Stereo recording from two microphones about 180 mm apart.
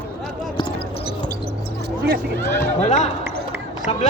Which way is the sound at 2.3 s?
15° left (ahead or behind).